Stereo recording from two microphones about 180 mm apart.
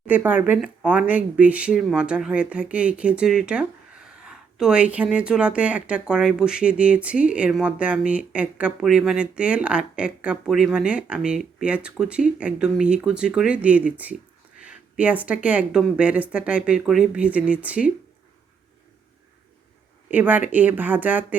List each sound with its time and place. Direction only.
0.1 s a woman's voice: 10° right (ahead or behind)
20.1 s a woman's voice: 10° right (ahead or behind)